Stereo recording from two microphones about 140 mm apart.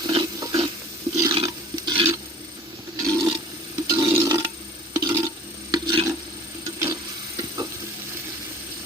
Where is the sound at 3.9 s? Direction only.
25° right (ahead or behind).